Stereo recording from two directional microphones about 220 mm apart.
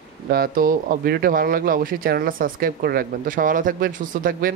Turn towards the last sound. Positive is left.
turn(degrees=-40)  # may be behind; listen again after turning